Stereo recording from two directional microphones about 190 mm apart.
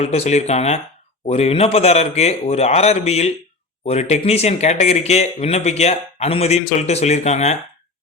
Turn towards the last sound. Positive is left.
turn(degrees=35)  # may be behind; listen again after turning